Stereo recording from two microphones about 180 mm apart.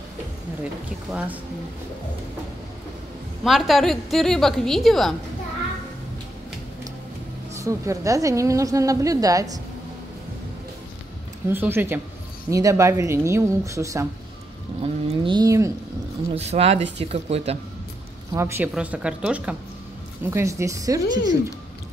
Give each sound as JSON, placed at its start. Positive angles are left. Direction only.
{"t": 3.4, "sound": "a woman's voice", "side_deg": 0}
{"t": 7.5, "sound": "a woman's voice", "side_deg": -15}
{"t": 11.4, "sound": "a woman's voice", "side_deg": -10}
{"t": 14.8, "sound": "a sound", "side_deg": -30}
{"t": 16.4, "sound": "speech", "side_deg": -35}
{"t": 18.3, "sound": "a woman's voice", "side_deg": -10}